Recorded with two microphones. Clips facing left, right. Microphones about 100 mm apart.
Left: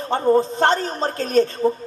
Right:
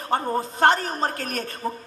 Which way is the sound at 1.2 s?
25° left (ahead or behind).